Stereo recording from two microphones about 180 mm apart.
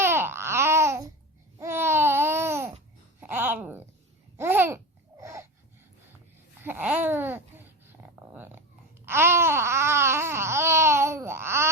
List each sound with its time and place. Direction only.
0.0 s babbling: 15° right (ahead or behind)
3.2 s a sound: 10° right (ahead or behind)
4.4 s babbling: 10° right (ahead or behind)
6.6 s babbling: 10° right (ahead or behind)